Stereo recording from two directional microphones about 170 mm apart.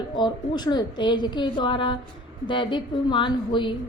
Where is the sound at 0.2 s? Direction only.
25° left (ahead or behind).